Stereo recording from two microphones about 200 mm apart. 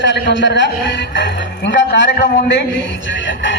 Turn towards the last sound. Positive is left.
turn(degrees=65)  # may be behind; listen again after turning